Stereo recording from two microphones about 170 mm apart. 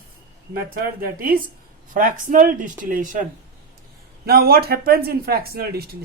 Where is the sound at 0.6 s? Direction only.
60° right (ahead or behind).